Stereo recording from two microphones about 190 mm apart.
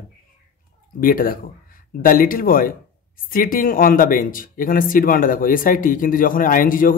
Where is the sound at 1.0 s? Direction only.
50° left (ahead or behind).